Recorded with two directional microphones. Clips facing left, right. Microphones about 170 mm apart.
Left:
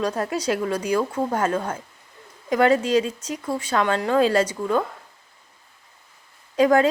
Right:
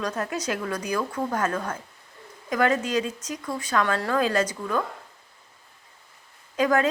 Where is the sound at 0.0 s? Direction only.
30° left (ahead or behind).